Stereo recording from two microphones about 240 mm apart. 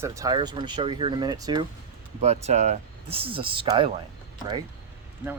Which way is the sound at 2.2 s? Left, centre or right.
Right.